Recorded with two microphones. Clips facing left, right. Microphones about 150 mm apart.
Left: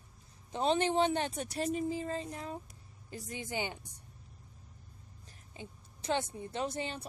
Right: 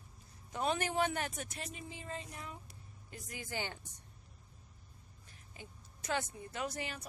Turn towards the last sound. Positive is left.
turn(degrees=25)  # may be behind; listen again after turning